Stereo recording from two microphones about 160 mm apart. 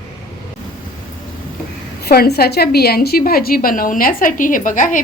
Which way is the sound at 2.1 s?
80° left.